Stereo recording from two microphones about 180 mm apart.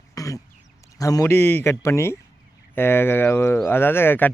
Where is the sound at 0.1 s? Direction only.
20° left (ahead or behind).